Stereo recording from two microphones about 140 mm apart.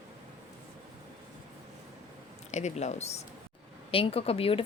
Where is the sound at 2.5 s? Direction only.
55° left (ahead or behind).